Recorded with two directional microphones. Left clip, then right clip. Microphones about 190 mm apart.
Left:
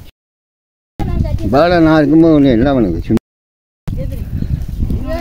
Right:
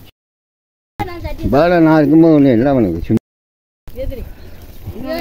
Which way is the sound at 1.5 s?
Centre (ahead or behind).